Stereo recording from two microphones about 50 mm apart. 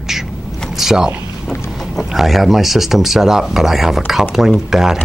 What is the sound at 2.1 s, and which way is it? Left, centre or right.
Speech, centre.